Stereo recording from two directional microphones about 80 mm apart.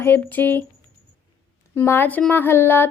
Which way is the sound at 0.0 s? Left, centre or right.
Left.